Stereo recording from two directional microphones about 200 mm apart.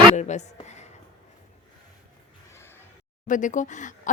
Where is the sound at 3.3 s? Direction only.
40° left (ahead or behind).